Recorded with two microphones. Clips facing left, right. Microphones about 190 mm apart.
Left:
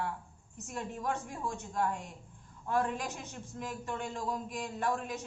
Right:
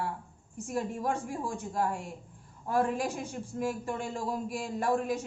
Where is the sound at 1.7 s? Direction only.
30° right (ahead or behind).